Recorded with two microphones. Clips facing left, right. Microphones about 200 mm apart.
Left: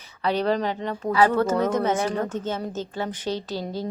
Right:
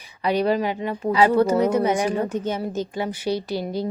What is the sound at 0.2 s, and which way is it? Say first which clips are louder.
A woman's voice: right 2 dB; 10° right (ahead or behind).